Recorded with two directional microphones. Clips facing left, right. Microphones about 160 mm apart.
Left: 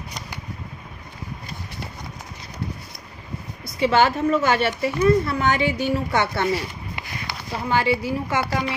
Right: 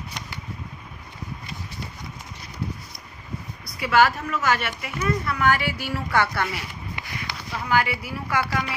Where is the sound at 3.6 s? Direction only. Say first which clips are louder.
Left 2 dB; 25° left (ahead or behind).